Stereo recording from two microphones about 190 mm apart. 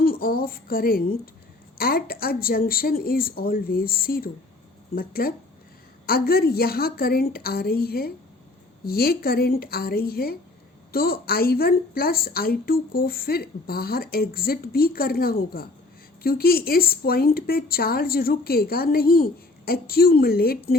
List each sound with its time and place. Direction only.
0.0 s a woman's voice: 50° left (ahead or behind)